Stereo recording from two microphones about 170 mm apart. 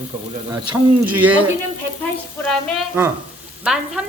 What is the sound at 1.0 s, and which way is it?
Speech, 10° right (ahead or behind).